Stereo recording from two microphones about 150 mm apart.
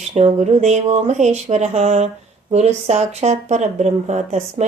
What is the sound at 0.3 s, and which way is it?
Speech, 50° right (ahead or behind).